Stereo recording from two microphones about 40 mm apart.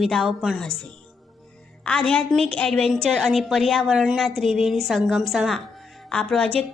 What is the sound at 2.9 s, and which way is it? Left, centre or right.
A woman's voice, centre.